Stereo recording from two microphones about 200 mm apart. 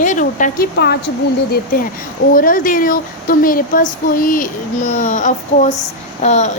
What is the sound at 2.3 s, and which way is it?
A woman's voice, 45° left (ahead or behind).